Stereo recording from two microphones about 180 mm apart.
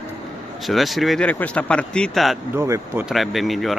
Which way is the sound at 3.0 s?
Centre (ahead or behind).